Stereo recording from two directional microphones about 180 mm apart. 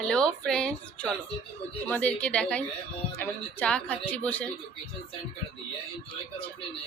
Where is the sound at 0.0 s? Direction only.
5° left (ahead or behind).